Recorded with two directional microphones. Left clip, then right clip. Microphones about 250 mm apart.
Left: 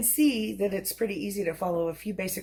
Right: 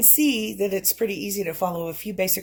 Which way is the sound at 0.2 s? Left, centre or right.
Right.